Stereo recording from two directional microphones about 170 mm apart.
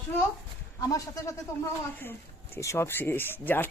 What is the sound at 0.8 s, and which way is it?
Speech, 20° left (ahead or behind).